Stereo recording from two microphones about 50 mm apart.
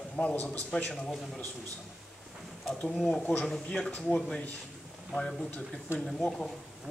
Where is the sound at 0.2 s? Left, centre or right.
Centre.